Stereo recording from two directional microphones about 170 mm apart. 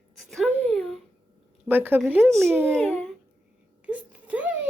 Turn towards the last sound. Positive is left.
turn(degrees=-10)  # may be behind; listen again after turning